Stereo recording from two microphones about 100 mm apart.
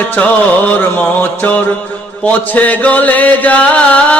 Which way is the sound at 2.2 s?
15° left (ahead or behind).